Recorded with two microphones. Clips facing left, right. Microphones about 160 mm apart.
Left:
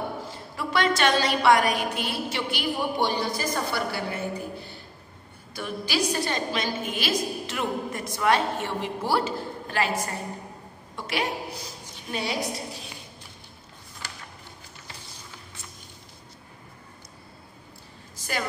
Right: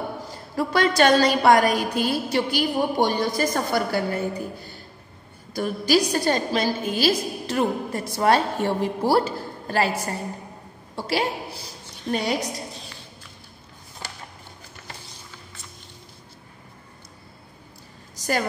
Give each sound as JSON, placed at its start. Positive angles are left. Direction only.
{"t": 0.6, "sound": "a woman's voice", "side_deg": -40}
{"t": 12.1, "sound": "a woman's voice", "side_deg": -45}